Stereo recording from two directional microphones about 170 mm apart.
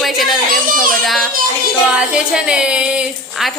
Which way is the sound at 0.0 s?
Centre (ahead or behind).